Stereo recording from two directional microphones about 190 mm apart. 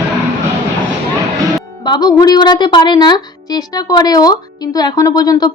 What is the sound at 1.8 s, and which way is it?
A woman's voice, 20° left (ahead or behind).